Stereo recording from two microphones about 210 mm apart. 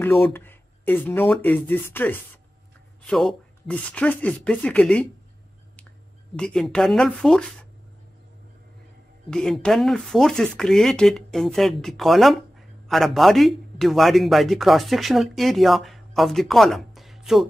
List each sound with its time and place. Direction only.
0.3 s a sound: 10° left (ahead or behind)
1.3 s speech: 10° left (ahead or behind)
6.3 s speech: 5° left (ahead or behind)
9.3 s speech: 5° left (ahead or behind)